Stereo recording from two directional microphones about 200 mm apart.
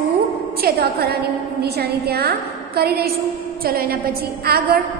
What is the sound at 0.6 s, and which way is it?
A woman's voice, 50° right (ahead or behind).